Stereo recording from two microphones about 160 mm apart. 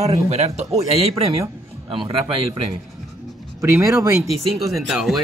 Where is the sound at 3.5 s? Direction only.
15° right (ahead or behind).